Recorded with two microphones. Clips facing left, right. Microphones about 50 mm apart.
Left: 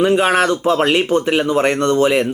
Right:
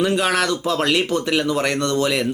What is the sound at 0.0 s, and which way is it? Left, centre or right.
Speech, left.